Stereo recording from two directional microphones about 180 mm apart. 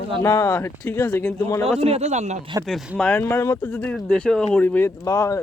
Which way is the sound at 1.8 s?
35° right (ahead or behind).